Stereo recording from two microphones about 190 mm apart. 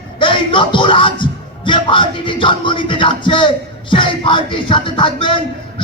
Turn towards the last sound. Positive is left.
turn(degrees=25)  # may be behind; listen again after turning